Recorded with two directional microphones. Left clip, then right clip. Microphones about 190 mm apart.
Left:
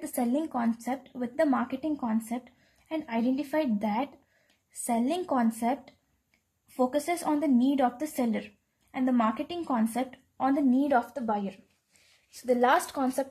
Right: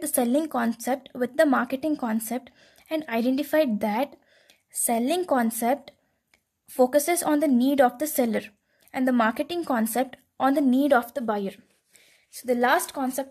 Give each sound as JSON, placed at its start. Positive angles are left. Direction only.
{"t": 0.0, "sound": "a woman's voice", "side_deg": -50}
{"t": 12.3, "sound": "speech", "side_deg": -35}